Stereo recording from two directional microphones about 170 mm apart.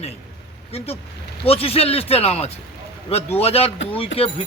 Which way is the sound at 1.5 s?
35° left (ahead or behind).